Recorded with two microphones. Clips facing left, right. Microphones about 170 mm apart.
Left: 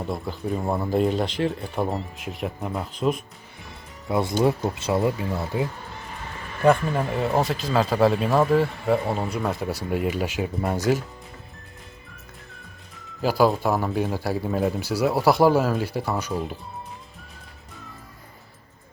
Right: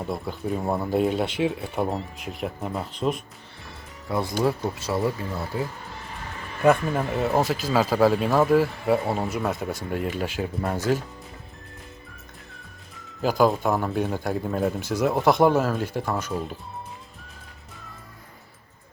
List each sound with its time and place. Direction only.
0.0 s speech: centre (ahead or behind)
4.1 s speech: 25° left (ahead or behind)
6.6 s speech: centre (ahead or behind)
13.2 s speech: 5° left (ahead or behind)